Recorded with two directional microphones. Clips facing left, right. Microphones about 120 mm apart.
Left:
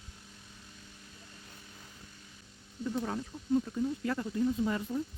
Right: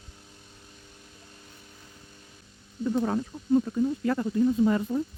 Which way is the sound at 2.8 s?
60° right (ahead or behind).